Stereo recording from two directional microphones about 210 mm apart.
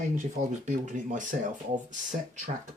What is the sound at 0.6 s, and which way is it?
Speech, 35° right (ahead or behind).